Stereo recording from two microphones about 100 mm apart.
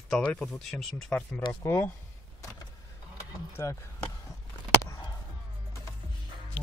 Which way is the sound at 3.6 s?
35° left (ahead or behind).